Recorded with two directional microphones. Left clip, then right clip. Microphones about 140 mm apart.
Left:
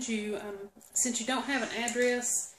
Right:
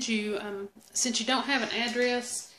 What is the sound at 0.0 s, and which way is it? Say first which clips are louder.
Speech: right 4 dB; 55° right (ahead or behind).